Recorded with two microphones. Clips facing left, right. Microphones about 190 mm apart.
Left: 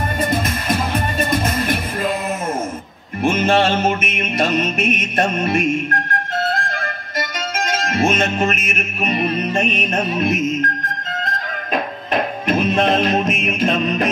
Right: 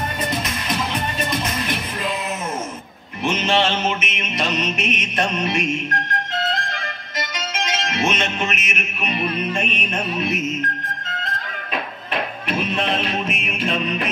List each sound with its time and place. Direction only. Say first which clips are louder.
0.2 s music: left 7 dB; 50° left (ahead or behind)
3.2 s music: left 4 dB; 50° left (ahead or behind)
11.7 s music: left 6 dB; 45° left (ahead or behind)